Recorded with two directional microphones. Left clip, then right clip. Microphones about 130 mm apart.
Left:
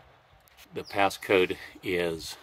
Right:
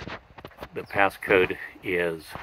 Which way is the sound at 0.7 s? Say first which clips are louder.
Right 3 dB; 35° left (ahead or behind).